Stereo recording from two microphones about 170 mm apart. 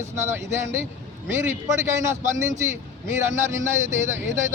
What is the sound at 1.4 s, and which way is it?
A man's voice, 15° right (ahead or behind).